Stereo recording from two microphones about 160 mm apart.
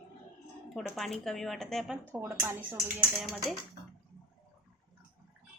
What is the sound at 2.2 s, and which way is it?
Speech, 15° right (ahead or behind).